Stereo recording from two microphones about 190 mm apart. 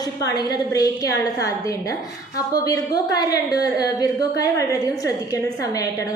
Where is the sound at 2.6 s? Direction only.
20° left (ahead or behind).